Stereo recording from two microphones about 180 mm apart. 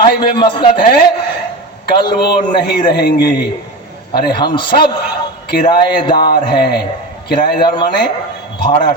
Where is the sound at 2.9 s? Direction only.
65° left (ahead or behind).